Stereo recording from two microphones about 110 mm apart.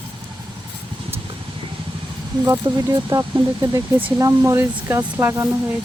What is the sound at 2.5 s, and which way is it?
Speech, 35° right (ahead or behind).